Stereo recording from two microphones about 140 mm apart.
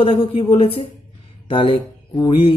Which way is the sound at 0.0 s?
40° left (ahead or behind).